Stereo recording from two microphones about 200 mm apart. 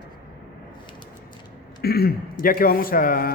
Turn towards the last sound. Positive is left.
turn(degrees=45)  # may be behind; listen again after turning